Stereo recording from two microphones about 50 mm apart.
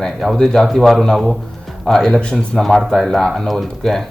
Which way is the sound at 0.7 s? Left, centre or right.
Centre.